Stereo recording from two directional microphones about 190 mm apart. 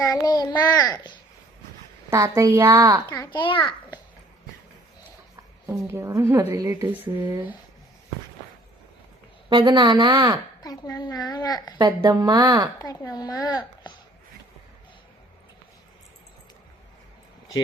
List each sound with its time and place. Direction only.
0.0 s a child's voice: 20° left (ahead or behind)
2.0 s a woman's voice: 20° right (ahead or behind)
3.1 s a child's voice: 20° left (ahead or behind)
5.6 s a woman's voice: 15° right (ahead or behind)
7.2 s a woman's voice: 20° right (ahead or behind)
9.5 s a woman's voice: 25° right (ahead or behind)
10.6 s a child's voice: 20° left (ahead or behind)
11.9 s a woman's voice: 15° right (ahead or behind)
12.8 s a child's voice: 20° left (ahead or behind)